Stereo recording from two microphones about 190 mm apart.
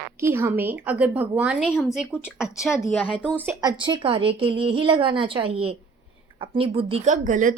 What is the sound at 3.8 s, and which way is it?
A woman's voice, 25° right (ahead or behind).